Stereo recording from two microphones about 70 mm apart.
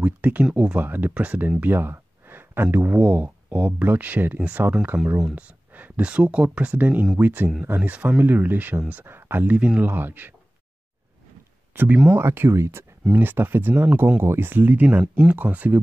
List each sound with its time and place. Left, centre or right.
0.0 s speech: right
11.7 s speech: right
14.2 s speech: right